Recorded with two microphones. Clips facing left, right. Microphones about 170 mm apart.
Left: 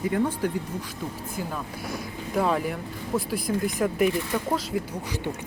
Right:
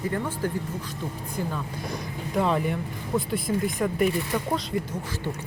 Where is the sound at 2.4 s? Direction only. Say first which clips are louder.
Even; centre (ahead or behind).